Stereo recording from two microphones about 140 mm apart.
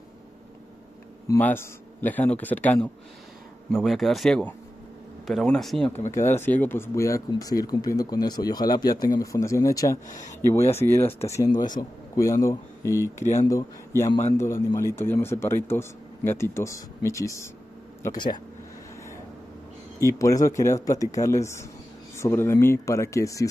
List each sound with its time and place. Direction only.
1.4 s a man's voice: 15° left (ahead or behind)
3.7 s speech: centre (ahead or behind)
6.1 s speech: 15° left (ahead or behind)
20.0 s speech: 25° left (ahead or behind)